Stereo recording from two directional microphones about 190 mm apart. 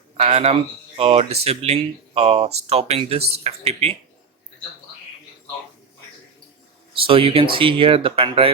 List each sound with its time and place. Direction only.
0.2 s speech: 35° right (ahead or behind)
7.1 s speech: 30° right (ahead or behind)